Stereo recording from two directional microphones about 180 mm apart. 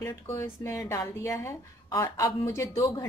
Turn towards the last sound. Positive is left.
turn(degrees=15)  # may be behind; listen again after turning